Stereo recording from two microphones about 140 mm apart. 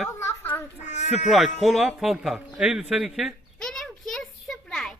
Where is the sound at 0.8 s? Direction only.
55° left (ahead or behind).